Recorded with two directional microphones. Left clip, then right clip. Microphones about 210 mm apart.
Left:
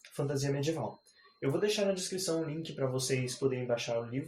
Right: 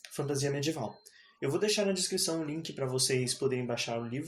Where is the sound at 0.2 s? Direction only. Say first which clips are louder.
Right 1 dB; 45° right (ahead or behind).